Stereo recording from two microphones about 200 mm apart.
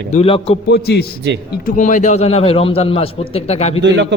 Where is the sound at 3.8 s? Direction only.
60° right (ahead or behind).